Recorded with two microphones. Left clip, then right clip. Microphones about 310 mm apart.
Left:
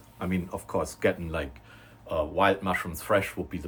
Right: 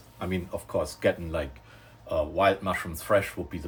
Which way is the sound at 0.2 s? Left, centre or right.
Centre.